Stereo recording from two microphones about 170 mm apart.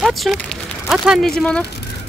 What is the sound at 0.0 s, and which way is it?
Speech, centre (ahead or behind).